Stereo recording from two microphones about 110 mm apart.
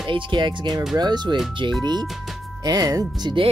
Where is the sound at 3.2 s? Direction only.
50° right (ahead or behind).